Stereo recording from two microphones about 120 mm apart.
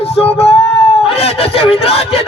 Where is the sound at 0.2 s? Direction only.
55° left (ahead or behind).